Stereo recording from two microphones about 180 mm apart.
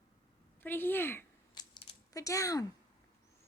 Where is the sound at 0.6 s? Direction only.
10° left (ahead or behind).